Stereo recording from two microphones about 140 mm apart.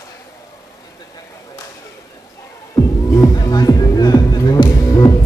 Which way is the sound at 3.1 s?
25° left (ahead or behind).